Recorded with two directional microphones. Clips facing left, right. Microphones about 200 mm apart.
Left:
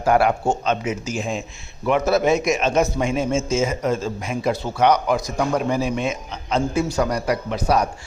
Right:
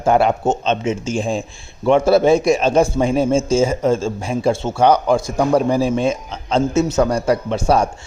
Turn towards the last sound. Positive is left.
turn(degrees=-25)  # may be behind; listen again after turning